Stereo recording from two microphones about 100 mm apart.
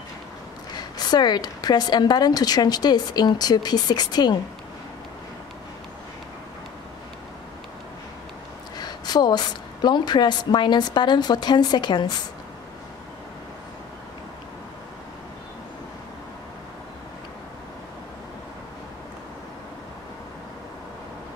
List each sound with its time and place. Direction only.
0.7 s a woman's voice: 45° left (ahead or behind)
8.7 s a woman's voice: 45° left (ahead or behind)